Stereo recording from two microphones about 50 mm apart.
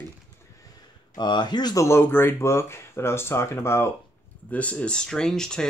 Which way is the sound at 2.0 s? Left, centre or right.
Left.